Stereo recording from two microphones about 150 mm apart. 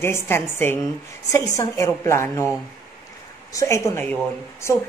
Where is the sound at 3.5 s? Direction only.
20° left (ahead or behind).